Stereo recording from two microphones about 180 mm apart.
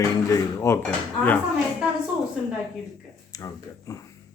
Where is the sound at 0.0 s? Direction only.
20° left (ahead or behind).